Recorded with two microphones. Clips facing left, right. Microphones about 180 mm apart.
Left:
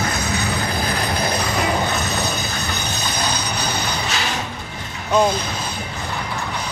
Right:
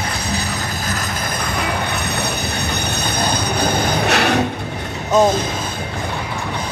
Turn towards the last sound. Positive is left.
turn(degrees=-45)  # may be behind; listen again after turning